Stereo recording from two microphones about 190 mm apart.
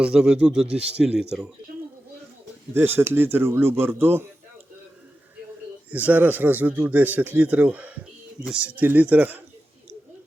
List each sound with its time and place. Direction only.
0.0 s speech: 5° right (ahead or behind)
2.7 s speech: 10° right (ahead or behind)
5.9 s speech: 10° right (ahead or behind)